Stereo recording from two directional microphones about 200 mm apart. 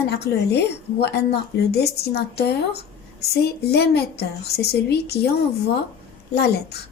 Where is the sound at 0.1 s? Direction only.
55° left (ahead or behind).